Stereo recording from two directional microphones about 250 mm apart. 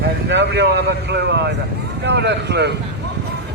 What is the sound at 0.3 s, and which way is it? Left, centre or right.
Speech, right.